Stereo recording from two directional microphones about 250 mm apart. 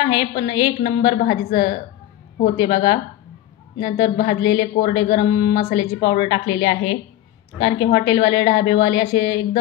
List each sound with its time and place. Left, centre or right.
0.0 s a woman's voice: centre
4.2 s a woman's voice: centre